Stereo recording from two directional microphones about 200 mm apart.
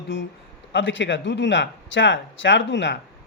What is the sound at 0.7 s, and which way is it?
A man's voice, 65° left (ahead or behind).